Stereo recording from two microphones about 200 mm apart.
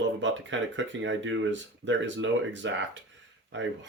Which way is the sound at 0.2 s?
65° right (ahead or behind).